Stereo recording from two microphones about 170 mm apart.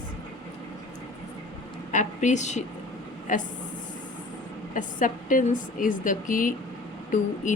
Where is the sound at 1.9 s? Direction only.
45° left (ahead or behind).